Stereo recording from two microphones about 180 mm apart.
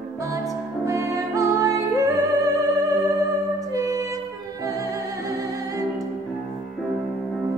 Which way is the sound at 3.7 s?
15° right (ahead or behind).